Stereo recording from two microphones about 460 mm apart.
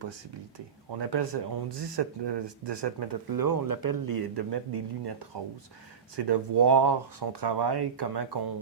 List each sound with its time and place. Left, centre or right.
0.9 s speech: right